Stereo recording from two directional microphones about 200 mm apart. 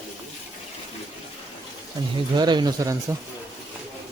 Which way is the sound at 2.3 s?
20° right (ahead or behind).